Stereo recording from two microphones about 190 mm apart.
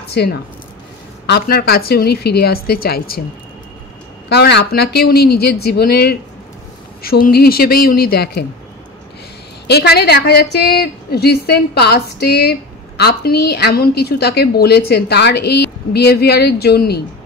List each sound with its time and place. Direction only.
0.1 s a woman's voice: 55° left (ahead or behind)
4.3 s a woman's voice: 60° left (ahead or behind)
9.7 s a woman's voice: 60° left (ahead or behind)